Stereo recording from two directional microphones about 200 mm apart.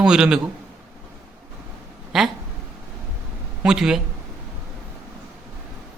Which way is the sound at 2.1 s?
Centre (ahead or behind).